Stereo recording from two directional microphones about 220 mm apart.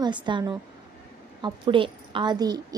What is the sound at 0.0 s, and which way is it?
A woman's voice, 20° right (ahead or behind).